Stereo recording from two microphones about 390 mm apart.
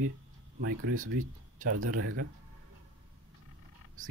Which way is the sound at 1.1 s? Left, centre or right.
Centre.